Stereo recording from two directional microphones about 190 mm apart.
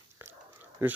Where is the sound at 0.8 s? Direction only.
15° right (ahead or behind).